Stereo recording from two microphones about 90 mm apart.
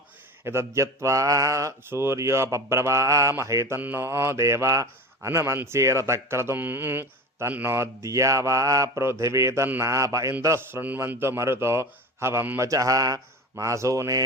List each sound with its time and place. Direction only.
0.4 s speech: 30° right (ahead or behind)
3.8 s a man's voice: 20° right (ahead or behind); by 14.2 s 35° right (ahead or behind)